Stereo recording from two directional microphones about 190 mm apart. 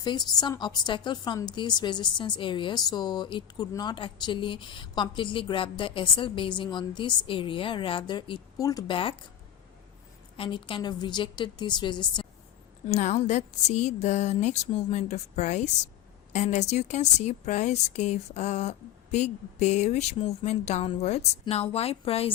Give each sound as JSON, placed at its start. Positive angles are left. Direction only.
{"t": 0.0, "sound": "a woman's voice", "side_deg": 20}
{"t": 10.3, "sound": "a woman's voice", "side_deg": 30}
{"t": 12.9, "sound": "speech", "side_deg": 40}